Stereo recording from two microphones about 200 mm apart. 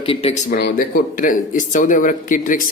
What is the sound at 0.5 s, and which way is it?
Speech, 45° left (ahead or behind).